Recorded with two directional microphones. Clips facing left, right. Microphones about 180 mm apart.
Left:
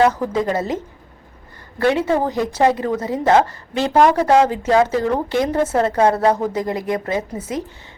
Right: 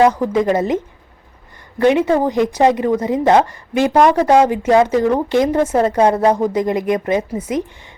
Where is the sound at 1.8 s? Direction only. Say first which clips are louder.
Right 4 dB; 15° right (ahead or behind).